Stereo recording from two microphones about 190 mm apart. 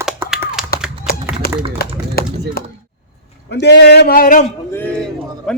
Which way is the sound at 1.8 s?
55° left (ahead or behind).